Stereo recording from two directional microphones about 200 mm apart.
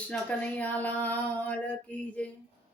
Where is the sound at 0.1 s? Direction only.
10° left (ahead or behind).